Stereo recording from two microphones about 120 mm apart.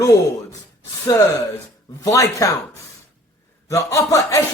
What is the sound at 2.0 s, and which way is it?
Speech, 25° left (ahead or behind).